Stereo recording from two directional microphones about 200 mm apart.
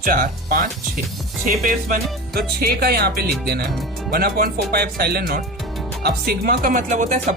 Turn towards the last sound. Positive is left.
turn(degrees=-40)  # may be behind; listen again after turning